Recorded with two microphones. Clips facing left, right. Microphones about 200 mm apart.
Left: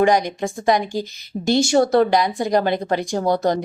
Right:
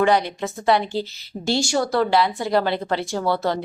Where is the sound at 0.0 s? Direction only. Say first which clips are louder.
Left 2 dB; 15° left (ahead or behind).